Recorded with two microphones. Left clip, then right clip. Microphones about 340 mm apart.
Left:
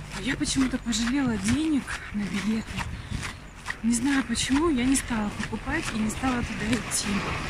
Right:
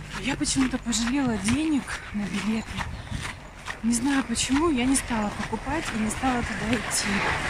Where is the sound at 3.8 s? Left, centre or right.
Centre.